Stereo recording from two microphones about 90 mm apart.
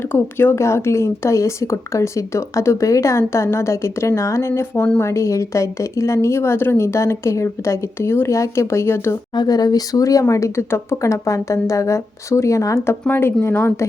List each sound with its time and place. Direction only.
0.1 s speech: 25° left (ahead or behind)
9.3 s speech: 50° left (ahead or behind); by 13.8 s 25° left (ahead or behind)